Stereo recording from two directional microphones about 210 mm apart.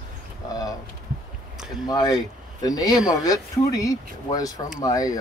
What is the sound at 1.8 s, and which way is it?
Speech, 15° left (ahead or behind).